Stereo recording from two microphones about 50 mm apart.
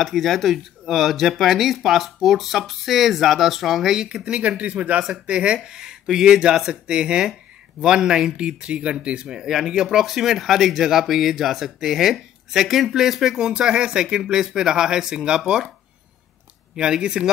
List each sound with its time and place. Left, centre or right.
0.0 s speech: centre
16.7 s speech: centre